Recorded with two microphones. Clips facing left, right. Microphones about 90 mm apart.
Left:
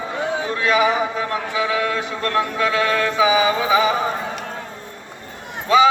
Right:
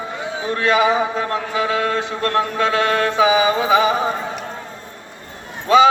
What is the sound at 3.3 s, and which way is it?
Music, 25° right (ahead or behind).